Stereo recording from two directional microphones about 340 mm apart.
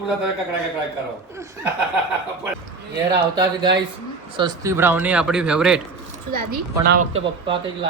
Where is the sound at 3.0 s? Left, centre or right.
Centre.